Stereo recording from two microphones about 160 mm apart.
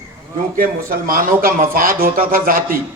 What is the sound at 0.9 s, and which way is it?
Speech, 60° right (ahead or behind).